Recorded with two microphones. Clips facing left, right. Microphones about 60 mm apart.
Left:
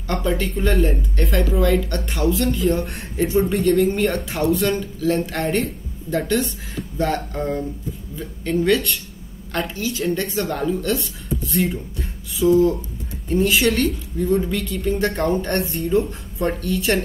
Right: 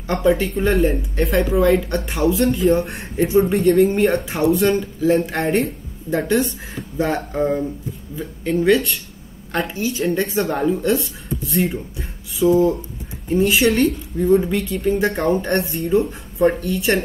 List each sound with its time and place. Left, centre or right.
0.0 s a woman's voice: centre
2.4 s a woman's voice: centre
9.9 s speech: centre
10.5 s a woman's voice: centre
11.0 s a woman's voice: centre